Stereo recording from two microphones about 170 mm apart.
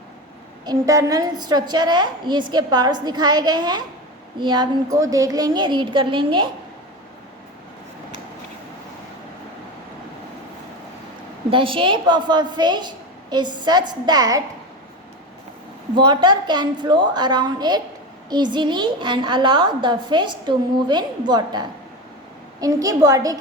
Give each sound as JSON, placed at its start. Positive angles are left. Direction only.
{"t": 0.6, "sound": "a woman's voice", "side_deg": -20}
{"t": 11.5, "sound": "a woman's voice", "side_deg": -30}
{"t": 16.0, "sound": "a woman's voice", "side_deg": -25}